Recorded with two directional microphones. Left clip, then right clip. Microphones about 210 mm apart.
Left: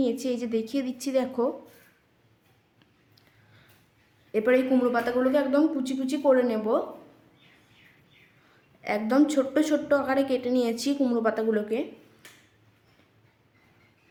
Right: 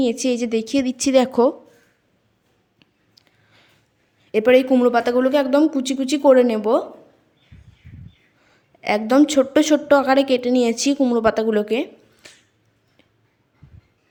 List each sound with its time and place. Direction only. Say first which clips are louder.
0.0 s a woman's voice: right 7 dB; 35° right (ahead or behind)
2.7 s a sound: right 8 dB; 30° right (ahead or behind)
4.3 s a woman's voice: right 8 dB; 35° right (ahead or behind)
8.8 s a woman's voice: right 7 dB; 35° right (ahead or behind)